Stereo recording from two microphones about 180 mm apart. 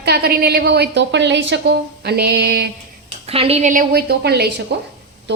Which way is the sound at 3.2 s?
35° right (ahead or behind).